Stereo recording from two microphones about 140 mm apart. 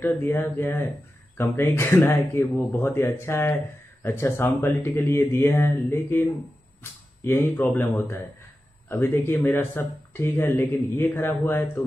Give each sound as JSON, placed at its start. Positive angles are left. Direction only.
{"t": 0.0, "sound": "speech", "side_deg": 15}